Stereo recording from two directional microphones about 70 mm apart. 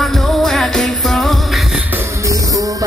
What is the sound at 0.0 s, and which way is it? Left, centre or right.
Music, centre.